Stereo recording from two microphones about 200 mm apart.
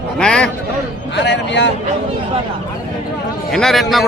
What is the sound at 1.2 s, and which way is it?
Speech, 60° left (ahead or behind).